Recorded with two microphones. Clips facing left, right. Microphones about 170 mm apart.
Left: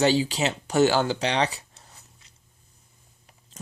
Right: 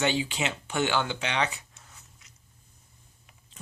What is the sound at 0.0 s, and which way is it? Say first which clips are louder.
Speech: left 6 dB; 35° left (ahead or behind).